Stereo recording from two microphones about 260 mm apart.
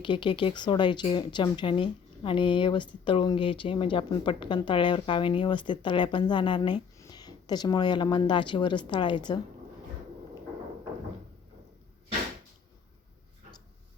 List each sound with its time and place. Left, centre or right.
0.0 s speech: centre